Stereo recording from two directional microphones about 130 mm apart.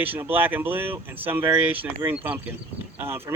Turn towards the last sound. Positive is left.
turn(degrees=-20)  # may be behind; listen again after turning